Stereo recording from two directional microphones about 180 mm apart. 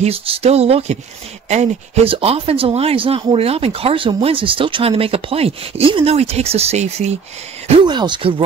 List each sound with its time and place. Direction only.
0.0 s speech: 35° right (ahead or behind)